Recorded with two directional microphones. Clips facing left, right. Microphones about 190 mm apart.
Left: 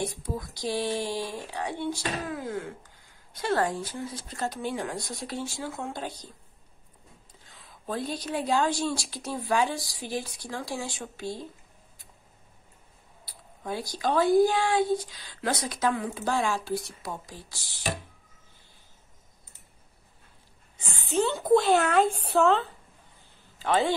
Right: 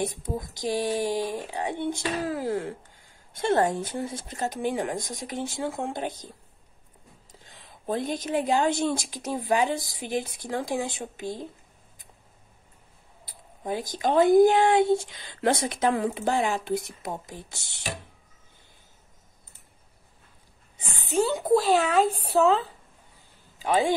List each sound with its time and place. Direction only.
0.0 s speech: 20° right (ahead or behind)
2.2 s speech: 30° right (ahead or behind)
7.5 s a sound: 20° right (ahead or behind)
8.3 s speech: 15° right (ahead or behind)
13.3 s speech: 15° right (ahead or behind)
21.5 s speech: centre (ahead or behind)
23.6 s a man's voice: 10° right (ahead or behind)